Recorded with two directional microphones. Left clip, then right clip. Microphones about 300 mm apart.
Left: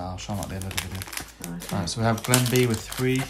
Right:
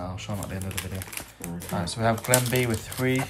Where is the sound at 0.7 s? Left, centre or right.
Left.